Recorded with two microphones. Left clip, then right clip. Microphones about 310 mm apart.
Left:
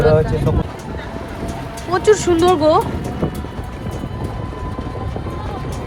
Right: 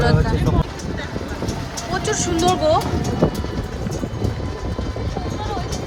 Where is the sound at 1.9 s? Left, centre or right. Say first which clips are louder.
Left 9 dB; centre.